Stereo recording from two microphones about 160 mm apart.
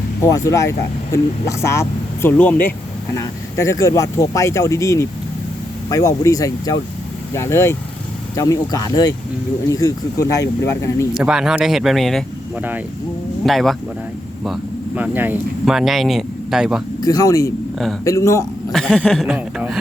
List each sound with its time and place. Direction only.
0.2 s speech: 20° left (ahead or behind)
11.1 s speech: 5° right (ahead or behind)
13.4 s speech: centre (ahead or behind)
17.0 s speech: 20° left (ahead or behind)
18.7 s speech: 5° left (ahead or behind)